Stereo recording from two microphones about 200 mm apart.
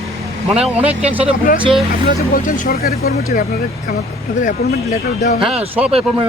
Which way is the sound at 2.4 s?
45° left (ahead or behind).